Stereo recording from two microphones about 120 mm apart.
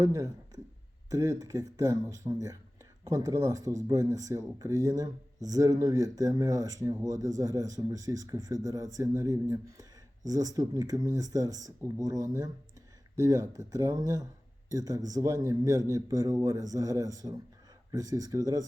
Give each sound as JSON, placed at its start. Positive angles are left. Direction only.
{"t": 0.0, "sound": "speech", "side_deg": -25}